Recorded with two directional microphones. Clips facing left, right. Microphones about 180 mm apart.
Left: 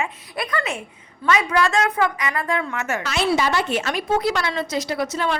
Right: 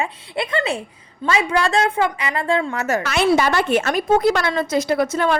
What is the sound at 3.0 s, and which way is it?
A woman's voice, 55° right (ahead or behind).